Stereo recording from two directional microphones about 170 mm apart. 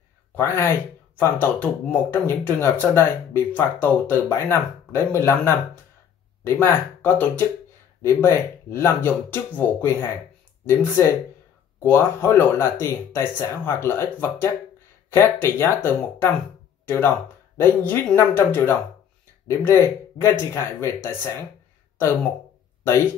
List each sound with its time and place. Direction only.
0.4 s speech: 15° left (ahead or behind)